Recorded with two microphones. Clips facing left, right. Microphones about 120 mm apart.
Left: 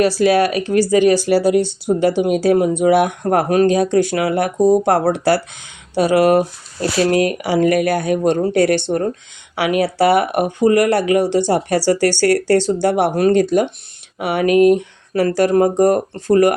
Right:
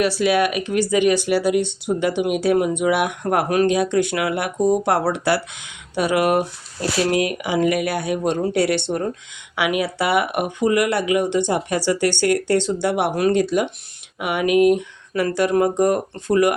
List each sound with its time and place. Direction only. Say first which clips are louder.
0.0 s speech: left 4 dB; 40° left (ahead or behind)